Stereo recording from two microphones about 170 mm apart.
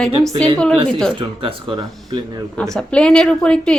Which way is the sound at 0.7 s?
30° right (ahead or behind).